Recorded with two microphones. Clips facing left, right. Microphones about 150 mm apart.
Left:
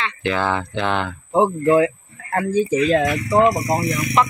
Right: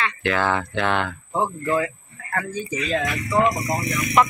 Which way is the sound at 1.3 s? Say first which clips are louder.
Left 8 dB; 30° left (ahead or behind).